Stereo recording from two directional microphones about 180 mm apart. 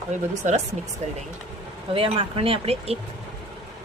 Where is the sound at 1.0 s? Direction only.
40° right (ahead or behind).